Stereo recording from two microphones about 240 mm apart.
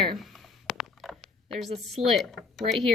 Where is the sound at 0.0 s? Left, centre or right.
Centre.